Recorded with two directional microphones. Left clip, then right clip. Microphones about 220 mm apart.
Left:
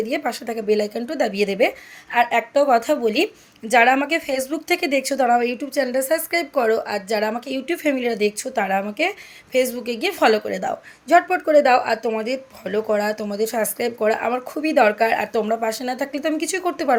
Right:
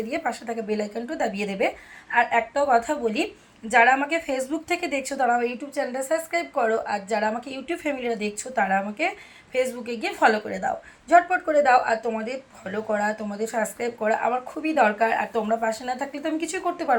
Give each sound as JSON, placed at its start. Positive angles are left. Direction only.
{"t": 0.1, "sound": "speech", "side_deg": 55}